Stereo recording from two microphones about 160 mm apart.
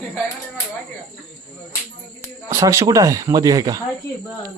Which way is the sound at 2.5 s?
20° right (ahead or behind).